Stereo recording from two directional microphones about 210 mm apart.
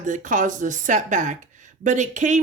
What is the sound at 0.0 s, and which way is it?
Speech, 35° right (ahead or behind).